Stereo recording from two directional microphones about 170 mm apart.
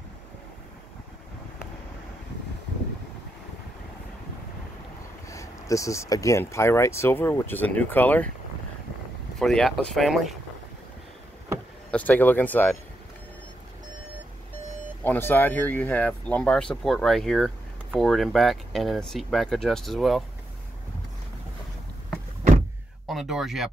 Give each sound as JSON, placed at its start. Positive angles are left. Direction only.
{"t": 5.3, "sound": "speech", "side_deg": 20}
{"t": 9.4, "sound": "speech", "side_deg": 5}
{"t": 11.9, "sound": "speech", "side_deg": 10}
{"t": 15.0, "sound": "speech", "side_deg": 10}
{"t": 23.0, "sound": "speech", "side_deg": 0}